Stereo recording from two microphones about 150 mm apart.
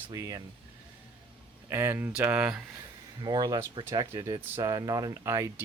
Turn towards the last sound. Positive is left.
turn(degrees=-20)  # may be behind; listen again after turning